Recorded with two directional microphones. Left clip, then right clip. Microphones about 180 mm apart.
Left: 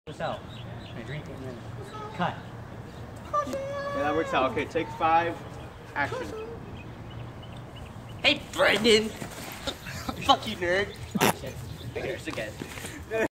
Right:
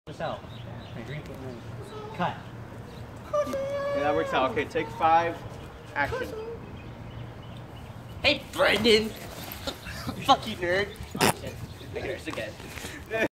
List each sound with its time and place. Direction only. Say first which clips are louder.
0.2 s speech: left 1 dB; 5° left (ahead or behind)
2.2 s speech: even; 5° left (ahead or behind)
3.3 s speech: right 2 dB; 40° right (ahead or behind)
8.2 s speech: even; 5° right (ahead or behind)
9.7 s a sound: left 1 dB; 10° left (ahead or behind)
10.2 s speech: right 1 dB; 5° right (ahead or behind)
11.9 s speech: even; 10° right (ahead or behind)